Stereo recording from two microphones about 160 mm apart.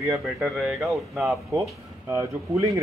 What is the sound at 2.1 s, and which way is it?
Speech, 20° right (ahead or behind).